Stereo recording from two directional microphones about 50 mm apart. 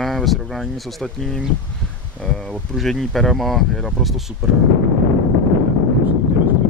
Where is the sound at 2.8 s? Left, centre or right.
Centre.